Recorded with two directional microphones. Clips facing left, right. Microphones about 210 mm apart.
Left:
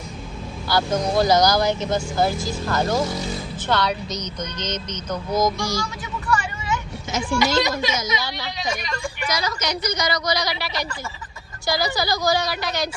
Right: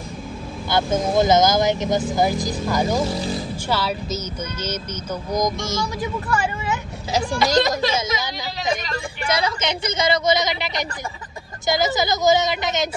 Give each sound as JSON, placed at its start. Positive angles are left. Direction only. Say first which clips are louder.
{"t": 0.7, "sound": "a woman's voice", "louder": "right 1 dB", "side_deg": -25}
{"t": 7.1, "sound": "speech", "louder": "right 1 dB", "side_deg": -35}
{"t": 8.2, "sound": "speech", "louder": "right 1 dB", "side_deg": -20}